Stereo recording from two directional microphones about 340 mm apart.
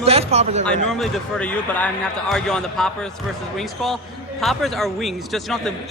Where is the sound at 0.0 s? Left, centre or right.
Centre.